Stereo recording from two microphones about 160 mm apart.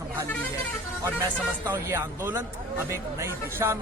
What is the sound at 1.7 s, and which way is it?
Speech, 15° right (ahead or behind).